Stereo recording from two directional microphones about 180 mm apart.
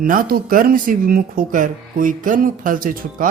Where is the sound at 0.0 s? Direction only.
50° right (ahead or behind).